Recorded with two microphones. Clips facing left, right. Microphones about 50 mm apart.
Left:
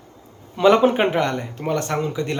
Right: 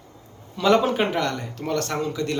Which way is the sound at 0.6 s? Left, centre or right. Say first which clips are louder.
Left 4 dB; left.